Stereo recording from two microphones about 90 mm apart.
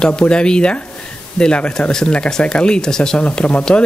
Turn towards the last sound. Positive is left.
turn(degrees=10)  # may be behind; listen again after turning